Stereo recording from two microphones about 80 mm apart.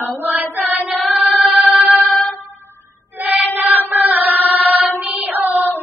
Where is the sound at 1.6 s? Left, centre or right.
Centre.